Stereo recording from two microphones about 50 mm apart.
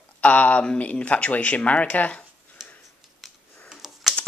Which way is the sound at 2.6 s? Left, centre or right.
Centre.